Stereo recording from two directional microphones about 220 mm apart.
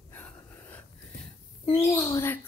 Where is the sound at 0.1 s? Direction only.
10° left (ahead or behind).